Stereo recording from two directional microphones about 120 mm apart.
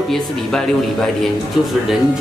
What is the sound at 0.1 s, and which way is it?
Speech, 5° left (ahead or behind).